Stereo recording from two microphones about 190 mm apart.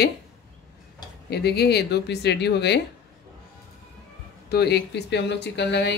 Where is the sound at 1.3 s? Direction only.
60° left (ahead or behind).